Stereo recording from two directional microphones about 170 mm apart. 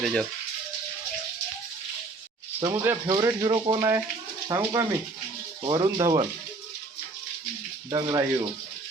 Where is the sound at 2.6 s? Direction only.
20° right (ahead or behind).